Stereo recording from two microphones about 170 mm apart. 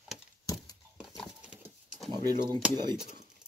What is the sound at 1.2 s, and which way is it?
Horse, 5° right (ahead or behind).